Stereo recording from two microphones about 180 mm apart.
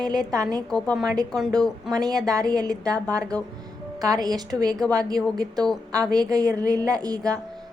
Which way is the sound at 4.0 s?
20° right (ahead or behind).